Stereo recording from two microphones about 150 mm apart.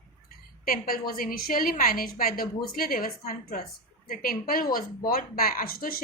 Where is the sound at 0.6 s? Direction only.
75° left (ahead or behind).